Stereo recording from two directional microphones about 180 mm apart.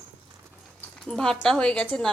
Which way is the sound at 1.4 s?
5° left (ahead or behind).